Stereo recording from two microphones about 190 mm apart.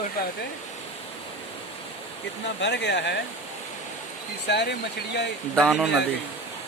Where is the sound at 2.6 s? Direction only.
65° left (ahead or behind).